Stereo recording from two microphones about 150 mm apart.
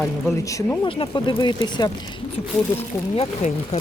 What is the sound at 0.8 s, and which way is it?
Speech, 35° left (ahead or behind).